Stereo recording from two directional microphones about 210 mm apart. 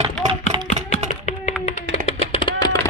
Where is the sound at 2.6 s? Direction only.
15° left (ahead or behind).